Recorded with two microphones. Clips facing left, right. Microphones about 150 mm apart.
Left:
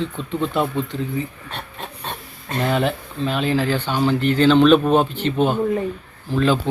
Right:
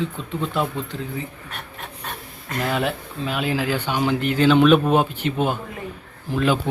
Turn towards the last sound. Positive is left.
turn(degrees=-10)  # may be behind; listen again after turning